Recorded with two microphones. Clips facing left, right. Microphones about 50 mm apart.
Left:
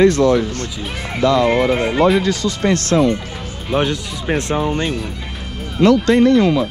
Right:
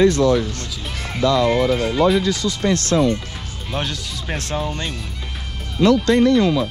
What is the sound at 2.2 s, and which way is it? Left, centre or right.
Speech, left.